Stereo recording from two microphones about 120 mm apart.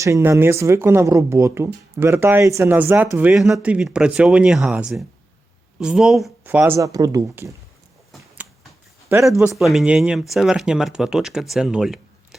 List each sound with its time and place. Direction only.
0.0 s speech: 20° right (ahead or behind); by 6.3 s centre (ahead or behind)
6.4 s speech: 15° right (ahead or behind)
6.7 s speech: 30° right (ahead or behind)
9.0 s a man's voice: 20° right (ahead or behind)
9.6 s speech: centre (ahead or behind)